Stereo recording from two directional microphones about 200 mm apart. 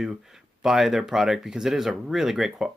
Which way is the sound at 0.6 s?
Centre (ahead or behind).